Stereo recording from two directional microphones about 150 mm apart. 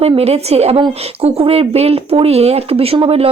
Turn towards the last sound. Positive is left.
turn(degrees=-40)  # may be behind; listen again after turning